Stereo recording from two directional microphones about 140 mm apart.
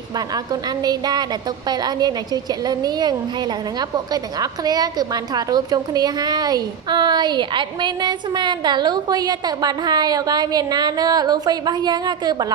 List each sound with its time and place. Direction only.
0.5 s a woman's voice: 30° right (ahead or behind)